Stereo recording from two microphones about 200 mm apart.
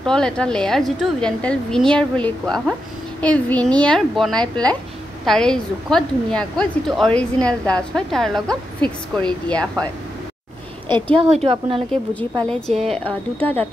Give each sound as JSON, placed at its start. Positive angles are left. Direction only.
{"t": 0.0, "sound": "a woman's voice", "side_deg": 5}
{"t": 11.1, "sound": "a woman's voice", "side_deg": -30}
{"t": 11.9, "sound": "a child's voice", "side_deg": 5}